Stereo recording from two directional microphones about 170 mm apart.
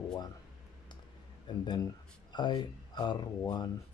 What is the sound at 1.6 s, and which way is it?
Speech, 25° left (ahead or behind).